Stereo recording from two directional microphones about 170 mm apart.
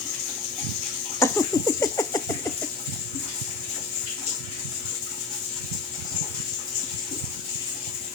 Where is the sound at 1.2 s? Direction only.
20° left (ahead or behind).